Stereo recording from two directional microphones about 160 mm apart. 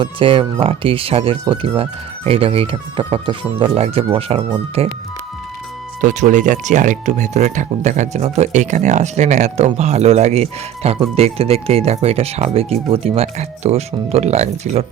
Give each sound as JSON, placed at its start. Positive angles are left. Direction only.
{"t": 0.0, "sound": "speech", "side_deg": -35}
{"t": 6.0, "sound": "speech", "side_deg": -50}